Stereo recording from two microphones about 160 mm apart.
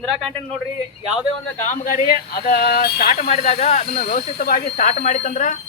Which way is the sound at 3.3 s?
40° left (ahead or behind).